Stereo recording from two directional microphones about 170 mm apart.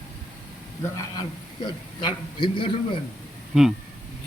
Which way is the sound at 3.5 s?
5° right (ahead or behind).